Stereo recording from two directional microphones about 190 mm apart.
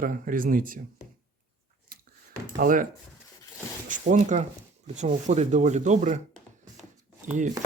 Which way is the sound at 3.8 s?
45° right (ahead or behind).